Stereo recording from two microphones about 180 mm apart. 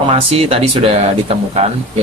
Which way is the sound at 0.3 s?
35° right (ahead or behind).